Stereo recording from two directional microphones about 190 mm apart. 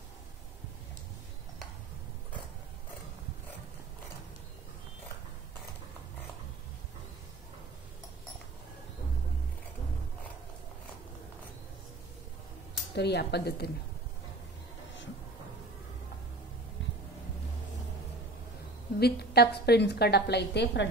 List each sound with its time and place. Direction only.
12.9 s a woman's voice: 60° left (ahead or behind)
18.9 s a woman's voice: 55° left (ahead or behind)